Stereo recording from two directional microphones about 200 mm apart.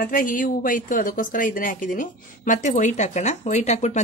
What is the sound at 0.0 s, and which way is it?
A woman's voice, 45° left (ahead or behind).